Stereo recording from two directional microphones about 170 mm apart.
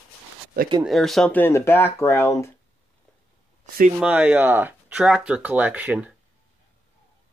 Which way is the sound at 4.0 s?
5° right (ahead or behind).